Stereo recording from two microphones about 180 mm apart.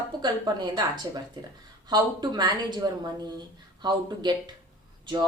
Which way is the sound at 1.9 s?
25° right (ahead or behind).